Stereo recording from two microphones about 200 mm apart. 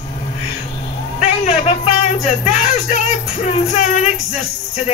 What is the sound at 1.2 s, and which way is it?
Speech, 35° left (ahead or behind).